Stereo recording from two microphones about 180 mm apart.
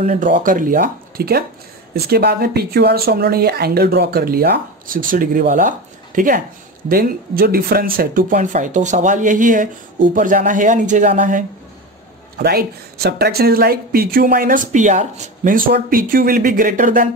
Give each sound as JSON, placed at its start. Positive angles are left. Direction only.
{"t": 0.0, "sound": "speech", "side_deg": -45}
{"t": 12.4, "sound": "speech", "side_deg": -60}